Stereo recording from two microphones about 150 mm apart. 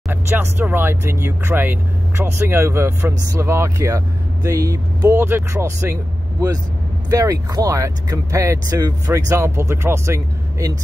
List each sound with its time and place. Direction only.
0.1 s speech: 15° right (ahead or behind)
7.1 s speech: 20° right (ahead or behind)